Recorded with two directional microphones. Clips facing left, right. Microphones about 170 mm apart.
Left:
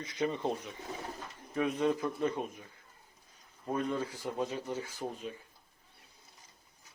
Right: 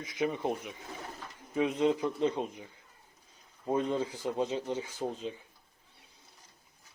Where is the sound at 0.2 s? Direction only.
10° right (ahead or behind).